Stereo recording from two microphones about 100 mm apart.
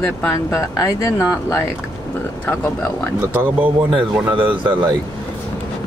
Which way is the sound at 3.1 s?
20° right (ahead or behind).